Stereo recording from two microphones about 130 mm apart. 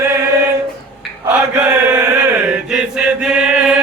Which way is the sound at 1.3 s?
15° right (ahead or behind).